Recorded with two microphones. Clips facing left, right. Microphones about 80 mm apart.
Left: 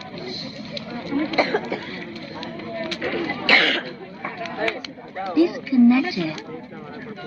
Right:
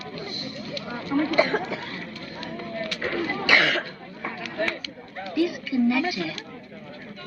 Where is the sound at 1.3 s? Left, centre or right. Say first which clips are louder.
Left 2 dB; right.